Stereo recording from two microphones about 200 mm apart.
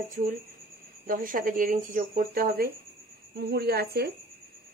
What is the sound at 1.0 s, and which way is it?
Speech, 45° right (ahead or behind).